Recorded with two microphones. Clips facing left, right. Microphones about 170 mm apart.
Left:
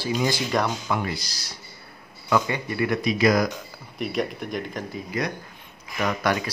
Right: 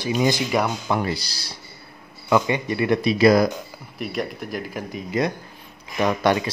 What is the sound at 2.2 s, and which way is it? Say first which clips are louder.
Speech: right 4 dB; 20° right (ahead or behind).